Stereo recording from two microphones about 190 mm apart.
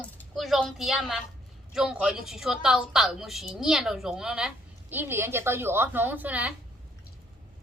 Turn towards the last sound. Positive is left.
turn(degrees=-10)  # may be behind; listen again after turning